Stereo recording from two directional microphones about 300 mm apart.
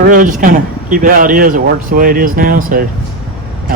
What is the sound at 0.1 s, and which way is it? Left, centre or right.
A man's voice, right.